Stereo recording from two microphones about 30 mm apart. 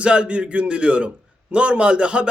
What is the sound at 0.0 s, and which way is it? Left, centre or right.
A man's voice, right.